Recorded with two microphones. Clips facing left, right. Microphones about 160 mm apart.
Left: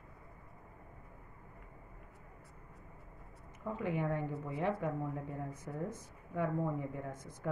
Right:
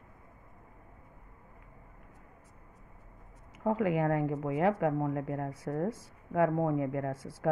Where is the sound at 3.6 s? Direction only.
90° right.